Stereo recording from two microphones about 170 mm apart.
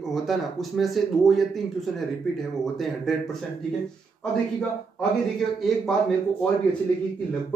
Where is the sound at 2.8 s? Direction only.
Centre (ahead or behind).